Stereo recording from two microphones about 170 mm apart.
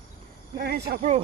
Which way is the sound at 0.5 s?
65° right (ahead or behind).